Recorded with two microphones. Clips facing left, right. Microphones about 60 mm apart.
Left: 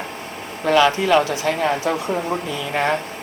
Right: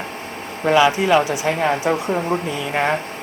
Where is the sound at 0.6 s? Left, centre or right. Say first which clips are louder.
Right 1 dB; centre.